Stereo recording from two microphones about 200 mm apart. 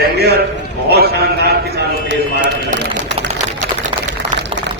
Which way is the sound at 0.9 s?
55° right (ahead or behind).